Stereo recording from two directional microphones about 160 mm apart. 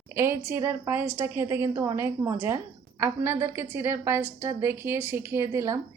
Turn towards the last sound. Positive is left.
turn(degrees=-20)  # may be behind; listen again after turning